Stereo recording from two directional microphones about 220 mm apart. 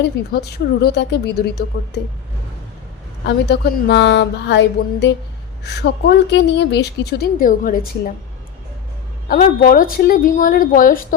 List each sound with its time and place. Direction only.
0.5 s a woman's voice: 50° left (ahead or behind)
3.2 s a woman's voice: 50° left (ahead or behind)
9.3 s a woman's voice: 40° left (ahead or behind)